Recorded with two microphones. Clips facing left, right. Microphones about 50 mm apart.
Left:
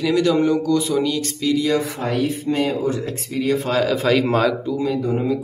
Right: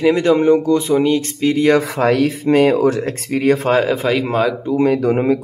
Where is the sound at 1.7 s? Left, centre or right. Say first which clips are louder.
Right 6 dB; right.